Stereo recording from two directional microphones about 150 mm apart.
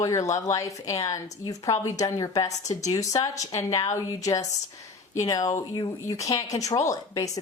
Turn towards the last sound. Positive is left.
turn(degrees=20)  # may be behind; listen again after turning